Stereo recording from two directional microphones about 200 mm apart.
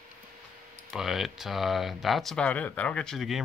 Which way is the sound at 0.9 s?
Centre (ahead or behind).